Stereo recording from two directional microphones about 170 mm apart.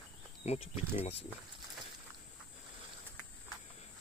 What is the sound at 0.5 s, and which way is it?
Speech, 40° left (ahead or behind).